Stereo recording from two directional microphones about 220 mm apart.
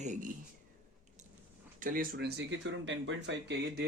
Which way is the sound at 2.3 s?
55° right (ahead or behind).